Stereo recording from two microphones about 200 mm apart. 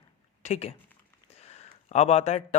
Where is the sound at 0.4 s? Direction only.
30° left (ahead or behind).